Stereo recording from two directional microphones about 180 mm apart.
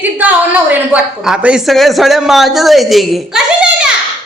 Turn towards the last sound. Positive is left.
turn(degrees=0)  # may be behind; listen again after turning